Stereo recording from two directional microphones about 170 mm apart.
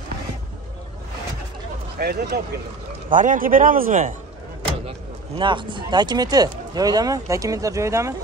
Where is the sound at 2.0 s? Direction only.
65° right (ahead or behind).